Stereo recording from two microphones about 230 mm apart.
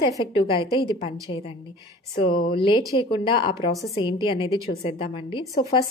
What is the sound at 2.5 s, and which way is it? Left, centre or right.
A woman's voice, left.